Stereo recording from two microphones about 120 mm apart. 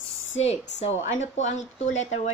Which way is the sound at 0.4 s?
65° left (ahead or behind).